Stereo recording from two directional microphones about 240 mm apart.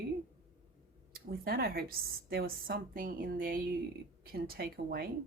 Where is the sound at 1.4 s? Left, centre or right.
Right.